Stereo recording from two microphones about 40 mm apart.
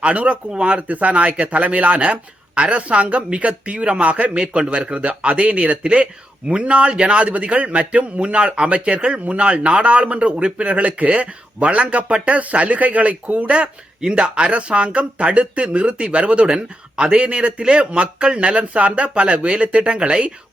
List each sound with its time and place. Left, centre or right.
0.0 s speech: right